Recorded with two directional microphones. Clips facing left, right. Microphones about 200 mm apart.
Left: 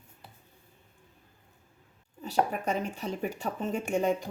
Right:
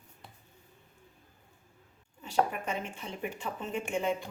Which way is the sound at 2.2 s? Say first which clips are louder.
Left 2 dB; 40° left (ahead or behind).